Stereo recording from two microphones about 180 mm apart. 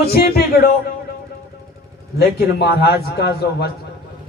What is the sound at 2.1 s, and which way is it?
A man's voice, 60° left (ahead or behind).